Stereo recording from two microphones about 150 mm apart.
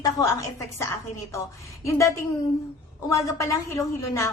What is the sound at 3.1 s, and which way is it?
A woman's voice, 20° left (ahead or behind).